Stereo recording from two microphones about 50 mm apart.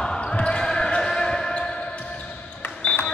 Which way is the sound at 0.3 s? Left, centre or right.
Centre.